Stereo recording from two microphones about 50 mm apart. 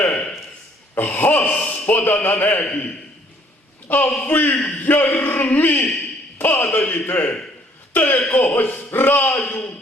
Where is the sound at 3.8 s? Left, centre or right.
Left.